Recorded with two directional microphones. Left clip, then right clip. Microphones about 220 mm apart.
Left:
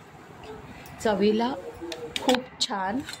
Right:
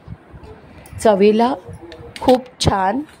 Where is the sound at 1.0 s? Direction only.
35° right (ahead or behind).